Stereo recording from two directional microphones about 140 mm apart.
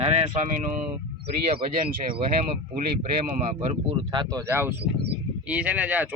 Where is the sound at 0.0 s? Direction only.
50° right (ahead or behind); by 0.8 s 65° right (ahead or behind).